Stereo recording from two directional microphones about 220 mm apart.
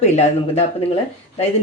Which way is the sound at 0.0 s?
30° left (ahead or behind).